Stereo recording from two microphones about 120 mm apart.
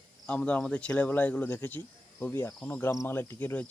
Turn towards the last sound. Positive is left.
turn(degrees=15)  # may be behind; listen again after turning